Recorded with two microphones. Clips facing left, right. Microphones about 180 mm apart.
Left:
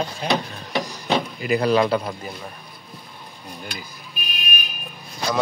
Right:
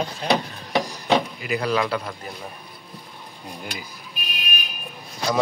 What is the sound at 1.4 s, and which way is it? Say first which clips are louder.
Speech: left 5 dB; 35° left (ahead or behind).